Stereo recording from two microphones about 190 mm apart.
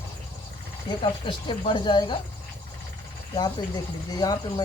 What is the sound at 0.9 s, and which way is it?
Speech, 25° left (ahead or behind).